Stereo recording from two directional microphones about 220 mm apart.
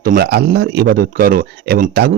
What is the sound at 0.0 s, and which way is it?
Speech, 45° right (ahead or behind).